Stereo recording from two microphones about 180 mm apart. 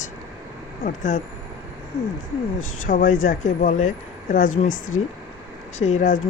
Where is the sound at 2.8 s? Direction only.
50° left (ahead or behind).